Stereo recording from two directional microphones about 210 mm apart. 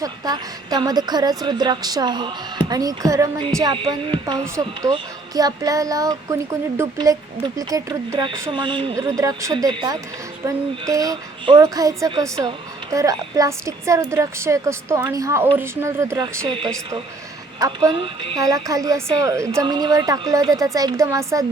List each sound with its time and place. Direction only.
0.0 s a woman's voice: 20° right (ahead or behind)
17.6 s speech: 20° right (ahead or behind)